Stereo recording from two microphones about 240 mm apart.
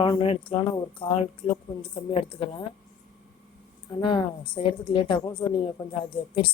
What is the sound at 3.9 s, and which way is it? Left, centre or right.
Speech, centre.